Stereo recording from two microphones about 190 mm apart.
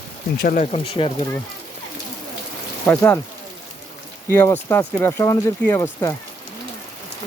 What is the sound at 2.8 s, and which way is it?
Speech, 10° left (ahead or behind).